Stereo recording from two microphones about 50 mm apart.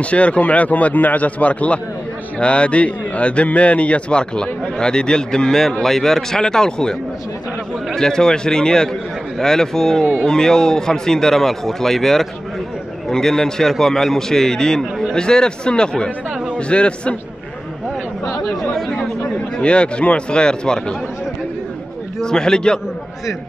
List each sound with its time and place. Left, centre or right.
0.0 s a man's voice: left
18.4 s speech: centre
19.5 s a man's voice: left
22.2 s a man's voice: centre